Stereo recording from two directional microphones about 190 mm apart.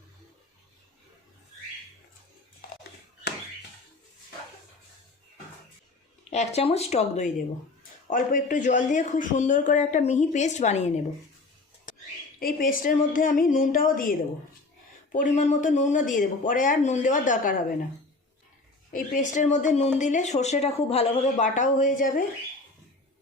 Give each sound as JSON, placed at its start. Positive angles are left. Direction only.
{"t": 6.3, "sound": "a man's voice", "side_deg": 35}
{"t": 12.4, "sound": "speech", "side_deg": 50}
{"t": 18.9, "sound": "a man's voice", "side_deg": 40}